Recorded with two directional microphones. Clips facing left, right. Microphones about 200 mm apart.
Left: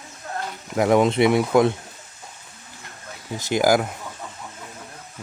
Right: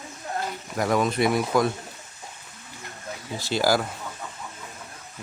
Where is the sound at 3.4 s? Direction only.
20° left (ahead or behind).